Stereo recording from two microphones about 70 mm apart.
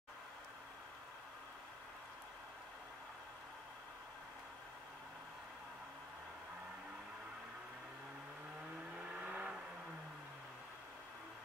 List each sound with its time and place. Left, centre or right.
9.1 s vehicle: centre